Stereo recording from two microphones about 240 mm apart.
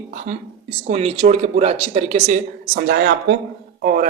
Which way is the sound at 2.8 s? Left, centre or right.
Right.